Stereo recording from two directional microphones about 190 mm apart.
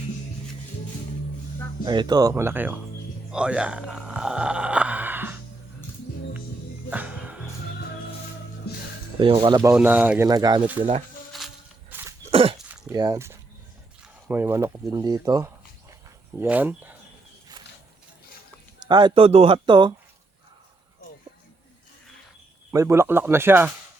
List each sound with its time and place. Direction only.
1.8 s speech: 25° right (ahead or behind)
3.3 s a sound: 5° right (ahead or behind)
6.9 s music: 10° right (ahead or behind)
9.1 s speech: 25° right (ahead or behind)
9.7 s speech: 10° right (ahead or behind)
10.2 s speech: 20° right (ahead or behind)
11.3 s a sound: 5° right (ahead or behind)
12.3 s a sound: 30° right (ahead or behind)
12.9 s speech: 20° right (ahead or behind)
18.9 s speech: 25° right (ahead or behind)
22.7 s speech: 15° right (ahead or behind)